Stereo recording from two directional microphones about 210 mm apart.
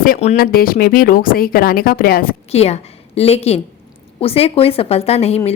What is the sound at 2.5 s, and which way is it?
A woman's voice, 30° left (ahead or behind).